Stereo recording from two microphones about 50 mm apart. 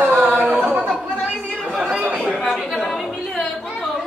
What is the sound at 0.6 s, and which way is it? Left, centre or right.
Chatter, right.